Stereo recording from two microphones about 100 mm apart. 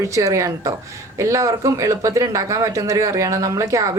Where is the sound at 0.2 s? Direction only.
35° right (ahead or behind).